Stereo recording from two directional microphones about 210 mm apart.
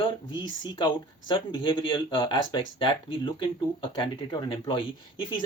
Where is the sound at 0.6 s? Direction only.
20° left (ahead or behind).